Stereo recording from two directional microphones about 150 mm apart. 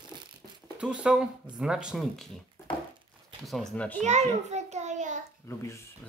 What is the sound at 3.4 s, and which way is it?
Speech, centre (ahead or behind).